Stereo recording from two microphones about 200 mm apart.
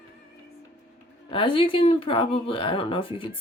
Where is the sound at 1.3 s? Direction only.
25° left (ahead or behind).